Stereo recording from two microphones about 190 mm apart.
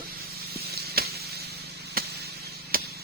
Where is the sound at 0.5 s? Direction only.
55° right (ahead or behind).